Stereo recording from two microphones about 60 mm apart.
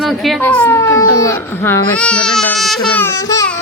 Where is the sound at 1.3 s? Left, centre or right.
Left.